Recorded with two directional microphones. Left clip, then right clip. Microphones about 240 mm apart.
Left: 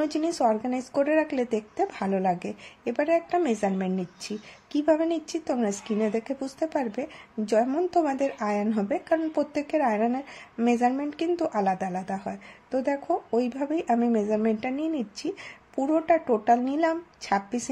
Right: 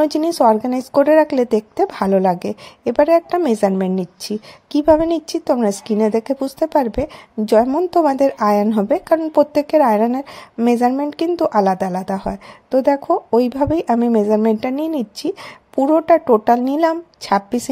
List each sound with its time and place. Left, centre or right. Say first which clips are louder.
0.0 s a woman's voice: right 11 dB; right